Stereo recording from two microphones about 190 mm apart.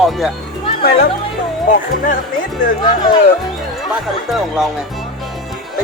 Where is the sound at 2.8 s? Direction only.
20° left (ahead or behind).